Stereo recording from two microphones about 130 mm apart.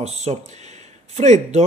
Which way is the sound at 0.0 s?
60° right (ahead or behind).